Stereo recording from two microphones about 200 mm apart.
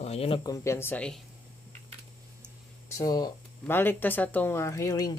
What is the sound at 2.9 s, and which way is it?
Speech, 20° left (ahead or behind).